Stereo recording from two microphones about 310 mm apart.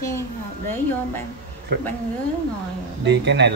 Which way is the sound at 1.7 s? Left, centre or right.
Right.